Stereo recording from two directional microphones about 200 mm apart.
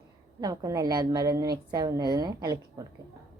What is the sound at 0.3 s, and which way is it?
A woman's voice, 20° right (ahead or behind).